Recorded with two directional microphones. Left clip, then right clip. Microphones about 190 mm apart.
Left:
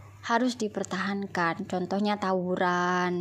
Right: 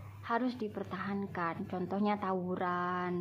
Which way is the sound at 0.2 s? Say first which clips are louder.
Left 8 dB; 35° left (ahead or behind).